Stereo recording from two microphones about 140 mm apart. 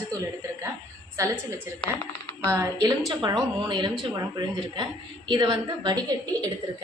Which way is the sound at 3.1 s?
35° right (ahead or behind).